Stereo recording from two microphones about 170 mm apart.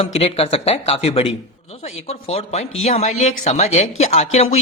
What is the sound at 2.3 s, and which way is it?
Speech, 40° left (ahead or behind).